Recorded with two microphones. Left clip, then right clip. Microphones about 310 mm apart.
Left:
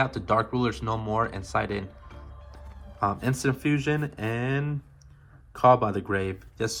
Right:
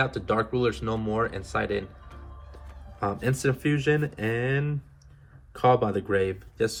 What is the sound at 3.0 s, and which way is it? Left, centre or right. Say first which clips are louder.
Speech: left 1 dB; centre.